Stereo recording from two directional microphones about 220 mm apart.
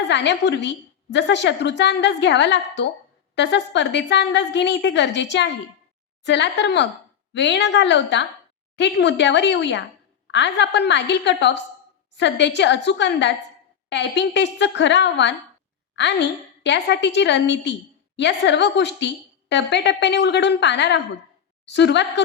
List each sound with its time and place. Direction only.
0.1 s a woman's voice: 50° left (ahead or behind)